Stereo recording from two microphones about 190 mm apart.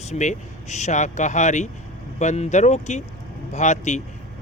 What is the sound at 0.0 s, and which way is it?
Speech, 40° left (ahead or behind).